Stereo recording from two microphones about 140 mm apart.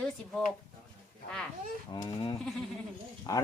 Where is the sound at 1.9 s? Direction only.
30° left (ahead or behind).